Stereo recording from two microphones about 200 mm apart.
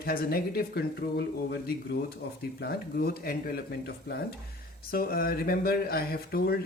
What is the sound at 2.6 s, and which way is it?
Speech, 50° left (ahead or behind).